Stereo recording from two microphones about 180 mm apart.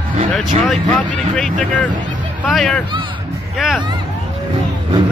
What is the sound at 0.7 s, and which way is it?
Speech, 5° left (ahead or behind).